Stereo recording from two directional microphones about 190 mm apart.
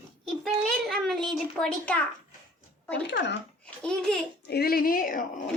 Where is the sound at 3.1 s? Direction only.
65° left (ahead or behind).